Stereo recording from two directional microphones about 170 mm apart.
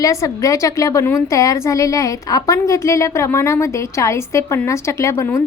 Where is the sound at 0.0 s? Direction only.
20° left (ahead or behind).